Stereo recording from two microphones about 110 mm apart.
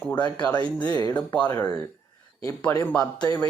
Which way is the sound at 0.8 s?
40° left (ahead or behind).